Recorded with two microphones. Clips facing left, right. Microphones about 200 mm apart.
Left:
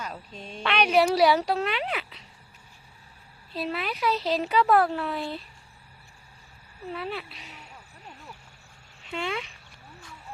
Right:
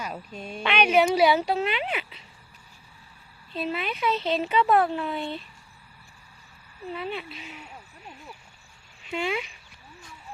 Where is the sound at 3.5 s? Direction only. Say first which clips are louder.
Right 1 dB; centre (ahead or behind).